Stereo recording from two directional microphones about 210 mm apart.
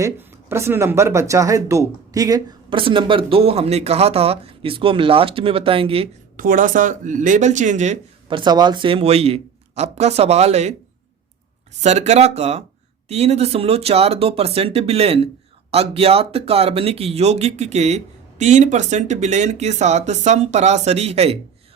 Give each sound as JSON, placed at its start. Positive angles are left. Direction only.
{"t": 0.0, "sound": "speech", "side_deg": -10}
{"t": 6.3, "sound": "speech", "side_deg": -40}
{"t": 11.8, "sound": "speech", "side_deg": -30}